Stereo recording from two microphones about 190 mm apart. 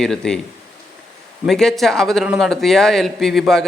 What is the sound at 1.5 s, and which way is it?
A man's voice, centre (ahead or behind).